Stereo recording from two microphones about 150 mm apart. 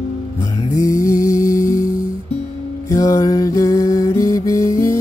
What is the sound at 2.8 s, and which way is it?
Music, 20° left (ahead or behind).